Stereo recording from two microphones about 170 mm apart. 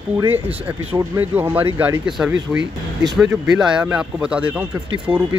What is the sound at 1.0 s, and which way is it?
Speech, 15° right (ahead or behind).